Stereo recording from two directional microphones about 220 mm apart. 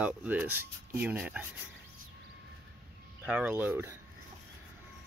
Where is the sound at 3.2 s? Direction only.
10° right (ahead or behind).